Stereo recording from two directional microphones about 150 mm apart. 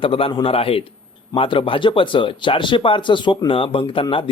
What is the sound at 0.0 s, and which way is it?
Speech, 40° left (ahead or behind).